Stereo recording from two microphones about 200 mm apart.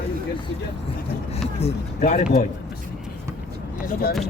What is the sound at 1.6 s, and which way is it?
Speech, 35° left (ahead or behind).